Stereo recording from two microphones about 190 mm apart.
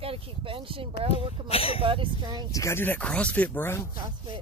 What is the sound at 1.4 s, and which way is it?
Speech, 30° left (ahead or behind).